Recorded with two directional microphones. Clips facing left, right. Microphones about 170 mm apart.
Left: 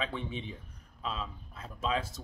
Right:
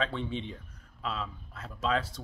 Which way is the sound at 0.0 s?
10° left (ahead or behind).